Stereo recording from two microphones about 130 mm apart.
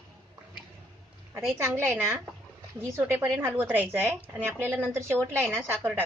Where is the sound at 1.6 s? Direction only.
20° right (ahead or behind).